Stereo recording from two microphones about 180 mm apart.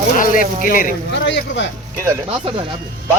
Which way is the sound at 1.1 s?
85° left.